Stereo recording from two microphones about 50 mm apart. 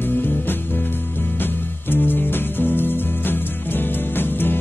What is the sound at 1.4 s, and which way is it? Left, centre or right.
Music, left.